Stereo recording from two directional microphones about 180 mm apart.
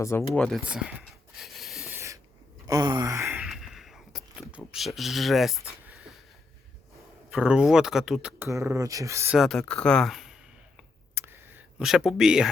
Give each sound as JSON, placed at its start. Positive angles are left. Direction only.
{"t": 0.0, "sound": "speech", "side_deg": 15}
{"t": 0.6, "sound": "speech", "side_deg": -5}
{"t": 1.4, "sound": "rub", "side_deg": 0}
{"t": 2.6, "sound": "sigh", "side_deg": -20}
{"t": 5.8, "sound": "a sound", "side_deg": -5}
{"t": 7.3, "sound": "speech", "side_deg": -5}
{"t": 8.4, "sound": "speech", "side_deg": -15}
{"t": 9.3, "sound": "speech", "side_deg": 0}
{"t": 11.1, "sound": "a sound", "side_deg": -10}